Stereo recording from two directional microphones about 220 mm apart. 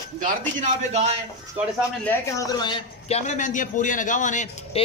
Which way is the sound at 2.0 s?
15° left (ahead or behind).